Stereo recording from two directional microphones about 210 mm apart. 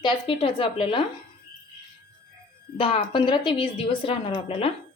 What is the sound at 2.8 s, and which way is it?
A woman's voice, 25° left (ahead or behind).